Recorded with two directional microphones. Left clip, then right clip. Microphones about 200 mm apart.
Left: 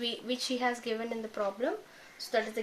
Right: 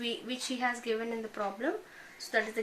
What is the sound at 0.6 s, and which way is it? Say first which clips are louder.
Speech: right 4 dB; 40° left (ahead or behind).